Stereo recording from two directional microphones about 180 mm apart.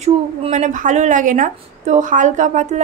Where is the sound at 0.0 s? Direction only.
40° right (ahead or behind).